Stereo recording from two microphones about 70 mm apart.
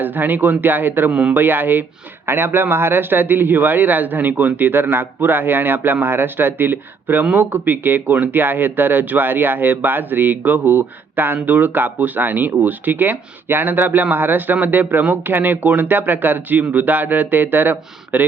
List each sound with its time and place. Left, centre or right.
0.0 s a man's voice: right
1.1 s a man's voice: centre
1.4 s a man's voice: right